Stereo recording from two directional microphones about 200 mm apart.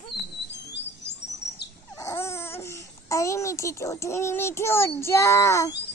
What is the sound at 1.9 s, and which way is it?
Babbling, 15° left (ahead or behind).